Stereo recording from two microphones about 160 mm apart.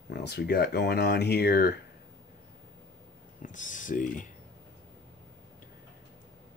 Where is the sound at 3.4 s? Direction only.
55° left (ahead or behind).